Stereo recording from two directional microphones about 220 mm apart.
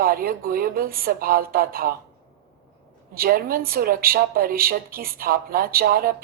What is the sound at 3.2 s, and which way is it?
A woman's voice, 40° right (ahead or behind).